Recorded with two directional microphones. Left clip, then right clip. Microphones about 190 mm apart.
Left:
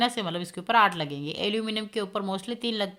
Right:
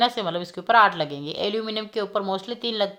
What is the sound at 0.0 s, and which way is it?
A woman's voice, 25° left (ahead or behind).